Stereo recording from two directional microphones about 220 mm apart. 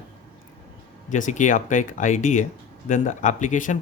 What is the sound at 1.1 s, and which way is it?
Speech, 35° left (ahead or behind).